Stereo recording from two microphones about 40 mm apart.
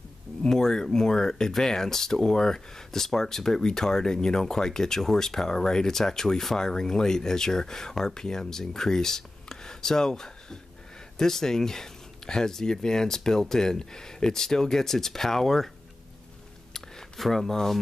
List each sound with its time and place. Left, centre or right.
0.4 s a sound: centre
0.8 s speech: centre
17.2 s speech: centre